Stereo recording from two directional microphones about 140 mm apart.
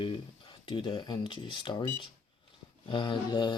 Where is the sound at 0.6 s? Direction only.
35° left (ahead or behind).